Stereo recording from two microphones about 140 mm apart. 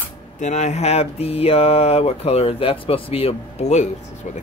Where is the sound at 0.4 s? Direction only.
55° left (ahead or behind).